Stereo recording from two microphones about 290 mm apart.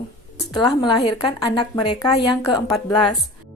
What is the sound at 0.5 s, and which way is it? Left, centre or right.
Speech, centre.